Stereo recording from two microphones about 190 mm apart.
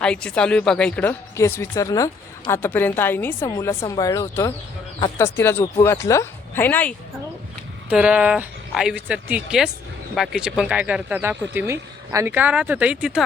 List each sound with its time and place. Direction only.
0.0 s a woman's voice: 5° left (ahead or behind)
7.9 s a woman's voice: 5° right (ahead or behind)